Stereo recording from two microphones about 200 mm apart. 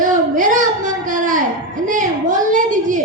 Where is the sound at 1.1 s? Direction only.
40° right (ahead or behind).